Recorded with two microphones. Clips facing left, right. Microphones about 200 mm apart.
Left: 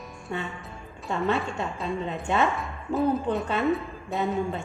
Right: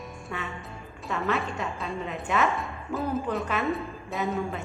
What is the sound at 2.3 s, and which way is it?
Speech, 30° left (ahead or behind).